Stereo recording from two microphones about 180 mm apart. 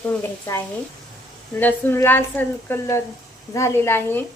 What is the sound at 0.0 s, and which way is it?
Speech, 15° left (ahead or behind).